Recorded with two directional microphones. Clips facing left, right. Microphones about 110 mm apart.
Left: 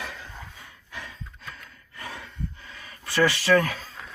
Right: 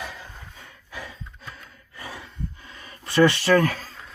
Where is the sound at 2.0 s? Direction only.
20° right (ahead or behind).